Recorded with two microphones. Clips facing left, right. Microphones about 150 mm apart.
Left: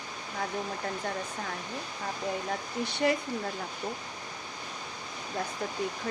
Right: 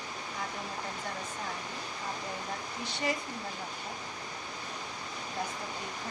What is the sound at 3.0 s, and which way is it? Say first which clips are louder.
Speech: left 6 dB; 60° left (ahead or behind).